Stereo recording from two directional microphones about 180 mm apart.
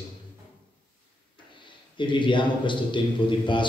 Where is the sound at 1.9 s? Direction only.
25° left (ahead or behind).